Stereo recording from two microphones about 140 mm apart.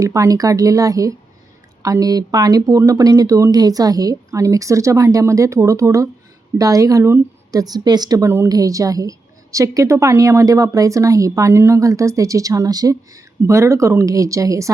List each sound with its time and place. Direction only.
0.0 s a woman's voice: 25° right (ahead or behind)